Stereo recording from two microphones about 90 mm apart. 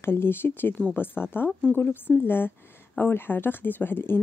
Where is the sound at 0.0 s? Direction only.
25° left (ahead or behind).